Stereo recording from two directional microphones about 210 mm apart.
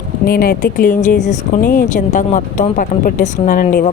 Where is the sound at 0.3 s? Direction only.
45° left (ahead or behind).